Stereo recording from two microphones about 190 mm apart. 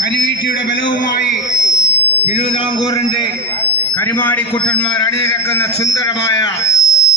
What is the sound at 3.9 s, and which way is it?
Speech, 10° left (ahead or behind).